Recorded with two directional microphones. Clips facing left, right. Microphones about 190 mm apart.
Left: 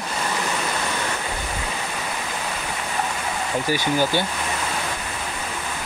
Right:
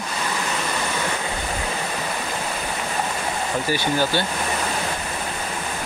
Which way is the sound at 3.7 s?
15° left (ahead or behind).